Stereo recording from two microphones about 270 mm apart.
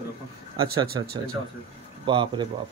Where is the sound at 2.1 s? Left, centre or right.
Centre.